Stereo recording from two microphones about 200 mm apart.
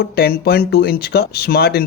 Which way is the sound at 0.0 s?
50° left (ahead or behind).